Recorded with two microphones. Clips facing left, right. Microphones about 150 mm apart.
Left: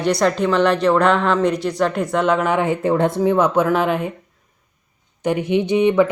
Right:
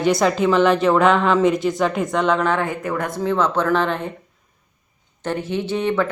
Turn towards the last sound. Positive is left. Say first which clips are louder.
# left 6 dB
turn(degrees=15)  # may be behind; listen again after turning